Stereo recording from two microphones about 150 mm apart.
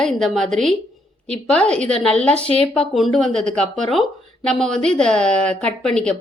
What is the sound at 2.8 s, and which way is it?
A woman's voice, centre (ahead or behind).